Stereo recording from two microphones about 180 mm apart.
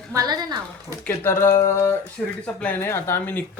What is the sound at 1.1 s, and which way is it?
Speech, 15° left (ahead or behind).